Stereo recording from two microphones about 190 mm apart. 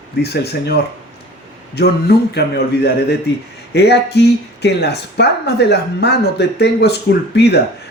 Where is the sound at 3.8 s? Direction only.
60° left (ahead or behind).